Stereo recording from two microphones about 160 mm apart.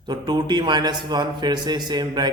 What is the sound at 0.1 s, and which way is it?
A man's voice, 25° right (ahead or behind).